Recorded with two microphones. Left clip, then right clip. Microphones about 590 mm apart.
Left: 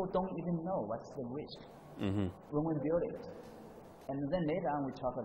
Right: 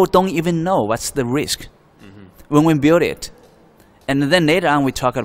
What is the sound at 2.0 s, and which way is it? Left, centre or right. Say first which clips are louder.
Speech: left 7 dB; left.